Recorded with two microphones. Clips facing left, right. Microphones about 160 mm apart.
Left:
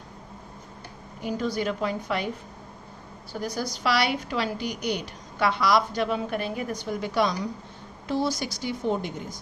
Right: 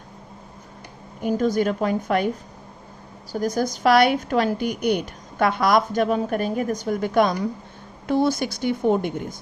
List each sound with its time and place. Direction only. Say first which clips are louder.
1.2 s a woman's voice: right 7 dB; 45° right (ahead or behind)
3.3 s a woman's voice: right 7 dB; 45° right (ahead or behind)